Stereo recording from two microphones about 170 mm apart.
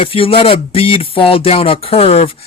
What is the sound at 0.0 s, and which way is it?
Speech, 35° left (ahead or behind).